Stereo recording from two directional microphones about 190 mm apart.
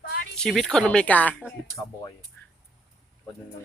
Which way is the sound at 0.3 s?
Centre (ahead or behind).